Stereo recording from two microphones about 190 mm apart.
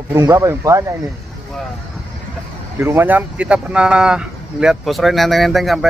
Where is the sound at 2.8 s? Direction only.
10° right (ahead or behind).